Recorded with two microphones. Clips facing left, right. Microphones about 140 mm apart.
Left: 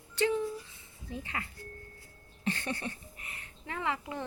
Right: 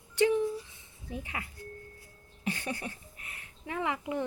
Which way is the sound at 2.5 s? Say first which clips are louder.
Left 1 dB; 10° right (ahead or behind).